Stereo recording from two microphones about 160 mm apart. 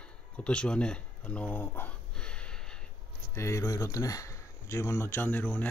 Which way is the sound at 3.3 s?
20° left (ahead or behind).